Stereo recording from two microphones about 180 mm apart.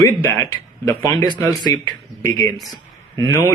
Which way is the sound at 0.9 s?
20° left (ahead or behind).